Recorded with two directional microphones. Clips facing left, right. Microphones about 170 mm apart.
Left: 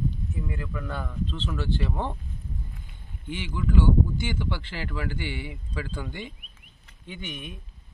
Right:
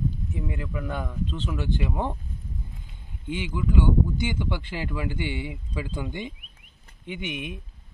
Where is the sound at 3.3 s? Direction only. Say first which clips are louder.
Right 1 dB; 15° right (ahead or behind).